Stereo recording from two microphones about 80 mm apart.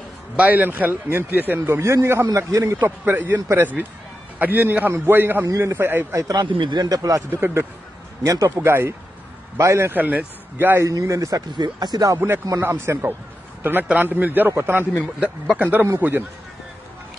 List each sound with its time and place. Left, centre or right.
0.4 s a man's voice: right
1.6 s a man's voice: right
6.1 s speech: right
6.4 s speech: right
7.2 s speech: right
8.2 s speech: right
8.5 s speech: right
9.9 s a man's voice: right
10.9 s speech: right
11.5 s speech: right
12.6 s a man's voice: right
15.1 s speech: centre
16.0 s a man's voice: right